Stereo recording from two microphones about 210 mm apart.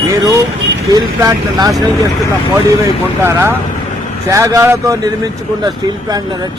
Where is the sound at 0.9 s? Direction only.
15° right (ahead or behind).